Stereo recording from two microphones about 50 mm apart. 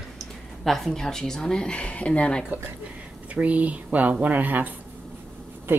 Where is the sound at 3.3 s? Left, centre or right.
Right.